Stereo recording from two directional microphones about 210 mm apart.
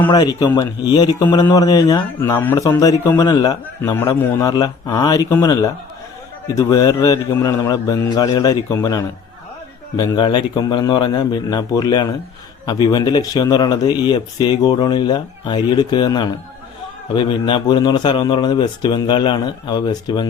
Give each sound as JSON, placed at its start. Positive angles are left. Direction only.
{"t": 0.1, "sound": "speech", "side_deg": 20}